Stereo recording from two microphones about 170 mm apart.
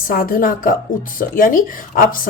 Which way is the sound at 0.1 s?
55° left (ahead or behind).